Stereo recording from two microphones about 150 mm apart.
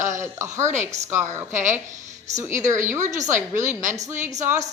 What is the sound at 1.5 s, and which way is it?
Speech, 55° right (ahead or behind).